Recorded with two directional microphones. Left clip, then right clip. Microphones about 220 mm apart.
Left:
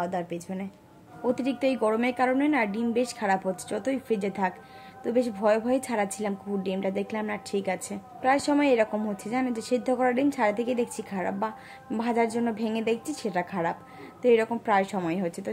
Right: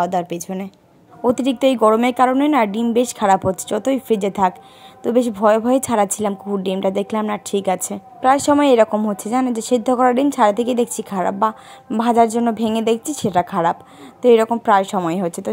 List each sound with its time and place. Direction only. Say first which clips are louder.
0.0 s a woman's voice: right 11 dB; 40° right (ahead or behind)